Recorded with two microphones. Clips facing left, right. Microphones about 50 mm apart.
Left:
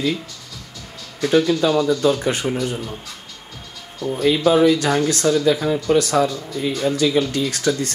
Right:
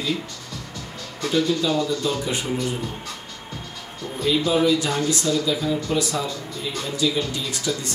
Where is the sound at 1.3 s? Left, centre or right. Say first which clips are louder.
Left 5 dB; left.